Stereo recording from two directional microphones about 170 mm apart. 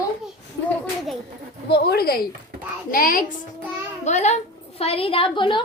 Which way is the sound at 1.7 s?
70° left (ahead or behind).